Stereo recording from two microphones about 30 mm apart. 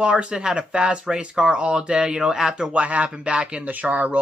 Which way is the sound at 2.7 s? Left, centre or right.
Right.